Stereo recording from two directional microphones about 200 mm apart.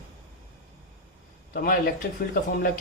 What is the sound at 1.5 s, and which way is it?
Speech, 50° left (ahead or behind).